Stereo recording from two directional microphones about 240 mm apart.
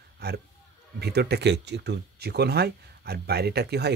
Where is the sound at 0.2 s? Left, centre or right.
Right.